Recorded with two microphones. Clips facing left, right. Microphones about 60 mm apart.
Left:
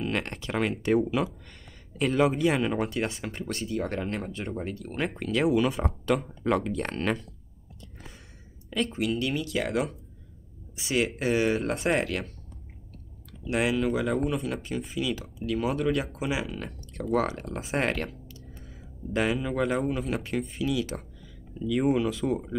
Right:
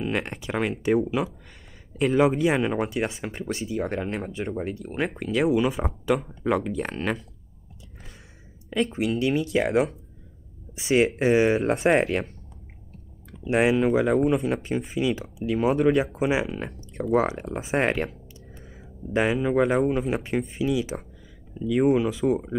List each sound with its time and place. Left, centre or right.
0.0 s speech: centre
8.7 s speech: right
13.3 s speech: right
14.4 s speech: right
15.7 s speech: centre
16.5 s speech: right
18.7 s a sound: centre
19.7 s speech: right